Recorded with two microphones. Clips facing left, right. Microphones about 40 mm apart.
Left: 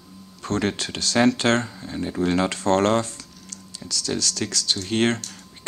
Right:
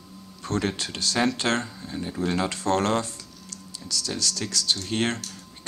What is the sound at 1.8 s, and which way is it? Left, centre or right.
Speech, left.